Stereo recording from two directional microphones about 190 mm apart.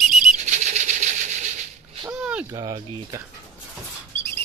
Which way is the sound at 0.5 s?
40° right (ahead or behind).